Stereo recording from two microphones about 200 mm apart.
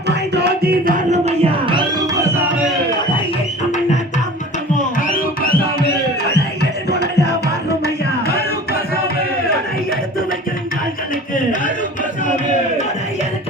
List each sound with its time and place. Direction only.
0.3 s music: 55° right (ahead or behind)
1.1 s music: 30° right (ahead or behind); by 2.4 s 15° right (ahead or behind)
6.6 s music: 55° left (ahead or behind)